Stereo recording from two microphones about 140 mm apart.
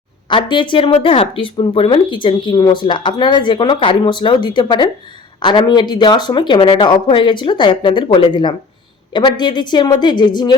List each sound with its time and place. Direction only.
0.3 s speech: 35° left (ahead or behind)